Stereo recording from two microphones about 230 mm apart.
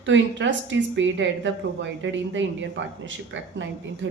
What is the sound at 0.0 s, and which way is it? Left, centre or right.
A woman's voice, right.